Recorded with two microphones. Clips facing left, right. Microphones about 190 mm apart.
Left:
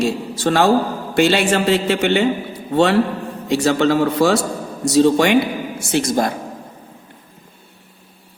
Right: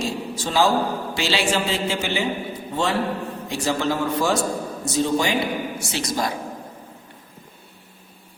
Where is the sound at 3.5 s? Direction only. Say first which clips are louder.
Left 8 dB; 70° left (ahead or behind).